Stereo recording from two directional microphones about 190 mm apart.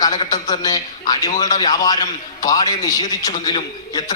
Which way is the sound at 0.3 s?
20° left (ahead or behind).